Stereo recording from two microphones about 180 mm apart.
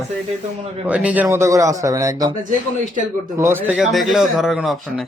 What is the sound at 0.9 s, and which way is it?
Speech, 5° right (ahead or behind).